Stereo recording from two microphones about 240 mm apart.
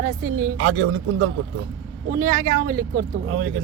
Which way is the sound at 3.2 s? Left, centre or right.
Right.